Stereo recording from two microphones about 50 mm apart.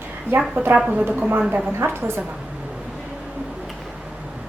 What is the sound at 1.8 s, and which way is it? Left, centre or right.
Speech, right.